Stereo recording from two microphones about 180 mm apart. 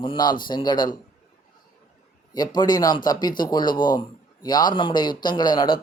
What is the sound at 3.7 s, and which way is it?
Speech, 50° left (ahead or behind).